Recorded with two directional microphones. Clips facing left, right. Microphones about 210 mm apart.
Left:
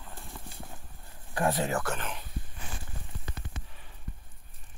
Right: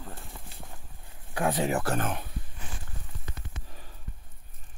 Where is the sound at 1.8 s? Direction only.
45° right (ahead or behind).